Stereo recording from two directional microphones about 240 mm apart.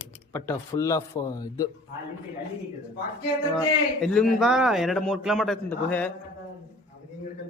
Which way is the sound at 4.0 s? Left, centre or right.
Centre.